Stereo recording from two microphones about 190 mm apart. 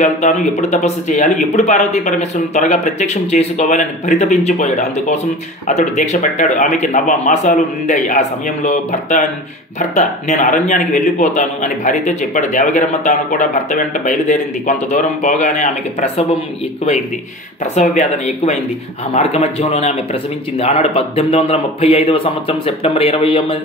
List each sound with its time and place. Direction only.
0.0 s speech: 35° left (ahead or behind)
9.8 s speech: 40° left (ahead or behind)
17.7 s speech: 40° left (ahead or behind)